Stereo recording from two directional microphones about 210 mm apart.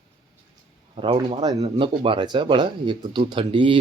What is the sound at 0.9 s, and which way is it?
Speech, 25° right (ahead or behind).